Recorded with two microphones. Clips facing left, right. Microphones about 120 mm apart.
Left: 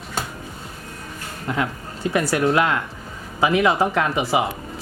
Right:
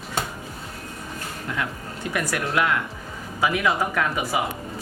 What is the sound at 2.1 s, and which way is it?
Speech, 30° left (ahead or behind).